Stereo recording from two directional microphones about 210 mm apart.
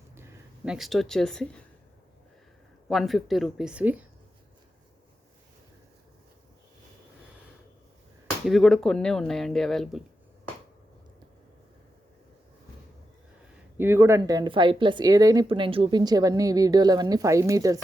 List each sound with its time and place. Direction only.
0.2 s speech: 5° right (ahead or behind)
2.9 s speech: centre (ahead or behind)
8.4 s speech: centre (ahead or behind)
13.7 s speech: 10° right (ahead or behind)